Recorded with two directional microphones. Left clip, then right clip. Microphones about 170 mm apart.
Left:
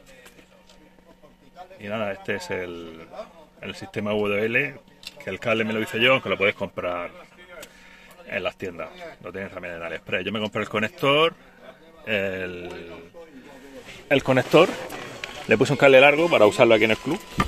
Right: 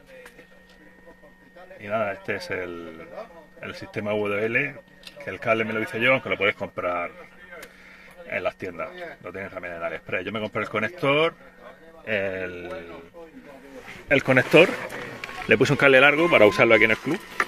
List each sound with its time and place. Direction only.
1.8 s speech: 15° left (ahead or behind)
8.3 s speech: 10° left (ahead or behind)
14.2 s speech: centre (ahead or behind)